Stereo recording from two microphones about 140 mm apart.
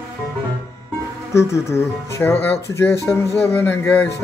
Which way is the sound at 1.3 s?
20° left (ahead or behind).